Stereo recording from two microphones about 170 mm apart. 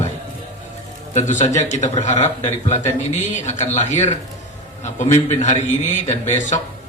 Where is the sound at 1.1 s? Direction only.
45° left (ahead or behind).